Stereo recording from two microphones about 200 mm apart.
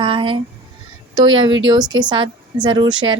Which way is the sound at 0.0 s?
25° right (ahead or behind).